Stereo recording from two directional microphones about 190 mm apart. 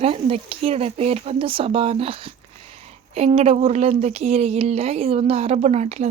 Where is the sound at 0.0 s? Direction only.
30° right (ahead or behind).